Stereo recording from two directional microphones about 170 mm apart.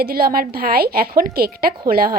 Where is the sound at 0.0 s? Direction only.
60° right (ahead or behind).